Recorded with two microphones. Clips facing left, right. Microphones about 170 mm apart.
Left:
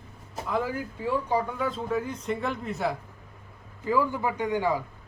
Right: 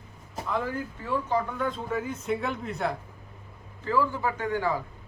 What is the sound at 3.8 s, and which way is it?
Speech, 15° left (ahead or behind).